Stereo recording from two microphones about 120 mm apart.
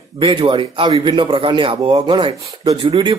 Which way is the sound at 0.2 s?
50° right (ahead or behind).